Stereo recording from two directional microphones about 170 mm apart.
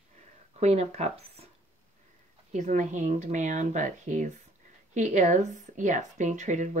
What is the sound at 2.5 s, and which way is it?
Speech, 45° right (ahead or behind).